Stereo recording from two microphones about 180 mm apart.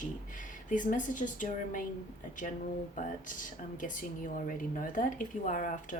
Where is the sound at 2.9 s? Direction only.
45° left (ahead or behind).